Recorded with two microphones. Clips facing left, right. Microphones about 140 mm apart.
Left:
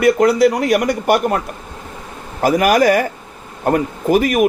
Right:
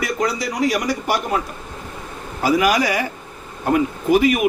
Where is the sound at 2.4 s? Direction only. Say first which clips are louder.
Left 5 dB; 50° left (ahead or behind).